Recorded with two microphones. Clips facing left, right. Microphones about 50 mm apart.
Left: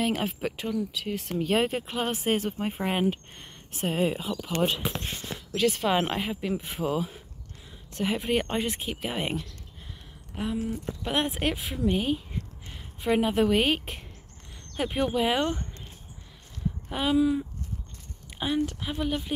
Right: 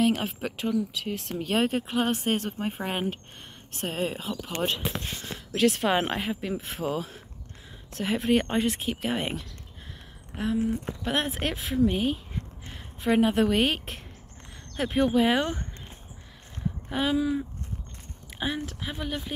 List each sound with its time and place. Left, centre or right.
0.0 s a woman's voice: centre
16.9 s speech: centre
18.4 s speech: centre